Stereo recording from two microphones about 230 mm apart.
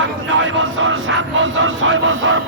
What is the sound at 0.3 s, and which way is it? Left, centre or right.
Speech, right.